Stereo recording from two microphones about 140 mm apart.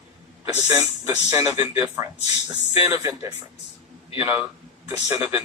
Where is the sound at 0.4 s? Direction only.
25° right (ahead or behind).